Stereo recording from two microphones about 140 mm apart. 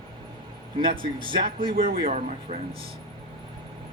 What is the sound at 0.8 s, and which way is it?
Speech, 35° right (ahead or behind).